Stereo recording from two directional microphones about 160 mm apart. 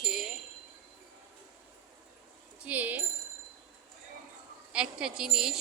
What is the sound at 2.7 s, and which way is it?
Speech, 10° right (ahead or behind).